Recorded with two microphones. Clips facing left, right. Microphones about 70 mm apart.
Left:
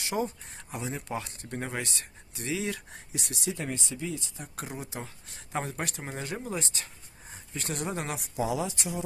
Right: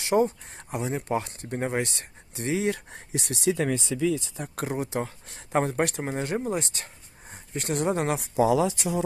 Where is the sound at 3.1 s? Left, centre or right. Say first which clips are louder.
Right 9 dB; right.